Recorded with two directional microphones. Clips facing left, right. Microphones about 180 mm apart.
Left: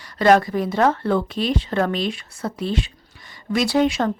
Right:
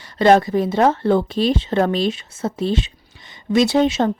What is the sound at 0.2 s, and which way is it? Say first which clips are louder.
Speech: right 2 dB; 25° right (ahead or behind).